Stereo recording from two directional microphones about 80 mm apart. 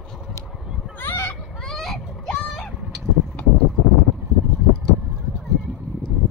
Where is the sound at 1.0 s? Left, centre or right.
Left.